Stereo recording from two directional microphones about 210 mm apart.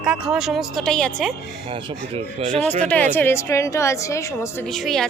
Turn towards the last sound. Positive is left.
turn(degrees=0)  # may be behind; listen again after turning